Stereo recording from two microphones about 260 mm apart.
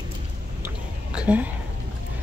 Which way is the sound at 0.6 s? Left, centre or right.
Centre.